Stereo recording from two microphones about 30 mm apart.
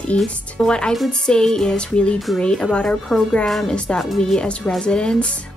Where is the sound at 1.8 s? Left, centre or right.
Left.